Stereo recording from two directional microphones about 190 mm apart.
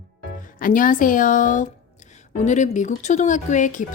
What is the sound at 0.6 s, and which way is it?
A woman's voice, 45° left (ahead or behind).